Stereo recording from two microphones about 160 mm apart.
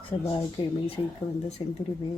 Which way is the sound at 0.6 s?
30° left (ahead or behind).